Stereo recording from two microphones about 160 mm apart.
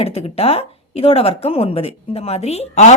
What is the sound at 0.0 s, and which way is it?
A woman's voice, 40° left (ahead or behind).